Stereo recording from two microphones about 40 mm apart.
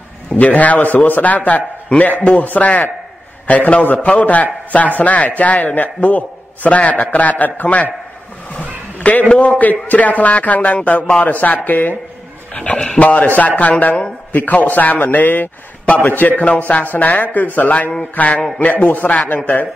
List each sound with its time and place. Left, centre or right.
0.4 s a man's voice: left
9.0 s a man's voice: left
12.5 s a man's voice: left